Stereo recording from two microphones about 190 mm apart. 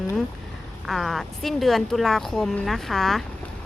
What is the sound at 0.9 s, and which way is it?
A woman's voice, centre (ahead or behind).